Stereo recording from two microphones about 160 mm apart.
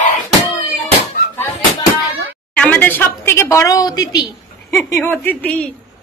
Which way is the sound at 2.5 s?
10° left (ahead or behind).